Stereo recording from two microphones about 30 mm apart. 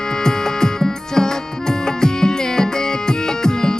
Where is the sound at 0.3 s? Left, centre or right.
Centre.